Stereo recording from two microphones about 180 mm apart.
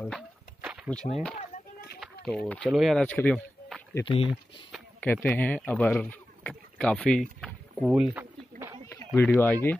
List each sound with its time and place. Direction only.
0.6 s a sound: 5° right (ahead or behind)
0.8 s speech: 5° left (ahead or behind)
4.0 s speech: 30° left (ahead or behind)
5.0 s speech: 10° left (ahead or behind)
5.7 s rowboat: 10° left (ahead or behind); by 8.7 s 10° right (ahead or behind)
9.1 s speech: 10° left (ahead or behind)